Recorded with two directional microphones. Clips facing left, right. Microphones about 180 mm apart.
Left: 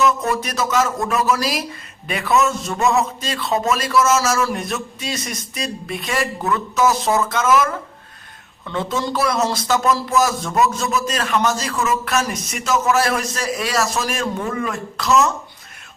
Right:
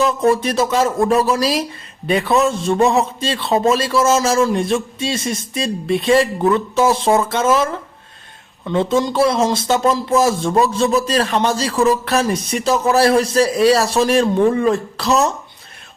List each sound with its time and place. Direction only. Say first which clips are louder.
0.0 s a man's voice: right 4 dB; 30° right (ahead or behind)